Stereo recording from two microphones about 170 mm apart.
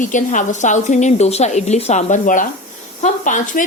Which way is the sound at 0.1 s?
45° left (ahead or behind).